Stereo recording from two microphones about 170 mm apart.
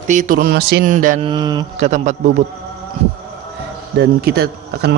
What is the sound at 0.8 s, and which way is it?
Speech, 50° right (ahead or behind).